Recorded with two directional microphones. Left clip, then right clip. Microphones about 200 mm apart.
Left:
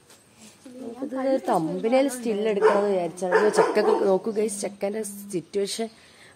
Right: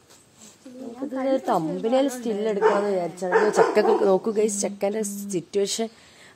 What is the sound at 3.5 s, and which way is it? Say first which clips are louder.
A woman's voice: right 1 dB; 15° right (ahead or behind).